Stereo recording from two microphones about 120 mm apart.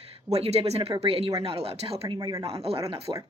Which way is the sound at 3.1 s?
40° right (ahead or behind).